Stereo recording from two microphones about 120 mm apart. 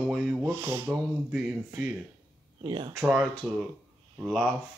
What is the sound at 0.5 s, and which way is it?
Speech, 20° right (ahead or behind).